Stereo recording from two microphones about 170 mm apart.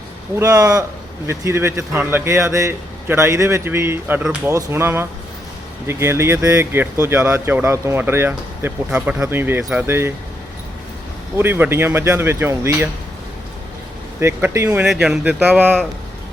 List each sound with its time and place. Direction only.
0.3 s speech: 20° right (ahead or behind)
11.3 s speech: 15° right (ahead or behind)
14.2 s speech: 15° right (ahead or behind)
14.8 s speech: 5° right (ahead or behind)